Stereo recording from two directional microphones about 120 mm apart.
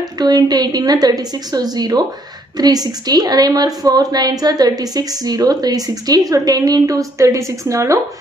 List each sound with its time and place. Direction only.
0.2 s a woman's voice: 35° right (ahead or behind)